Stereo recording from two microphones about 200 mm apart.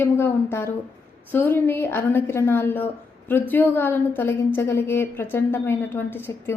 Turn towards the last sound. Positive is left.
turn(degrees=10)  # may be behind; listen again after turning